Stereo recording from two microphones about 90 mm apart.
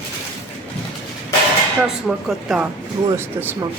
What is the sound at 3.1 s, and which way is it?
Speech, 25° right (ahead or behind).